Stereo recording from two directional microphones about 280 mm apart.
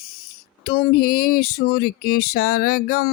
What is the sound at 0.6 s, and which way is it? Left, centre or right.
Music, left.